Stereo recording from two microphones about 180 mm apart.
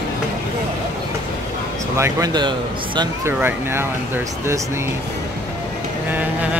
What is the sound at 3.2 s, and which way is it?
Speech, 15° right (ahead or behind).